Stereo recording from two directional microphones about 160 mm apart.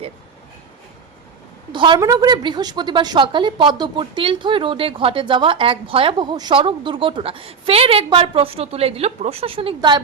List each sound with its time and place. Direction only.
1.7 s a woman's voice: 30° right (ahead or behind)